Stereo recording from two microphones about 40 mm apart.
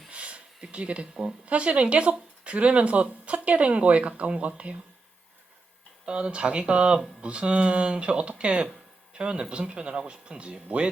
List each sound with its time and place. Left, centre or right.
0.1 s a sound: right
1.1 s speech: centre
1.5 s speech: right
6.1 s speech: right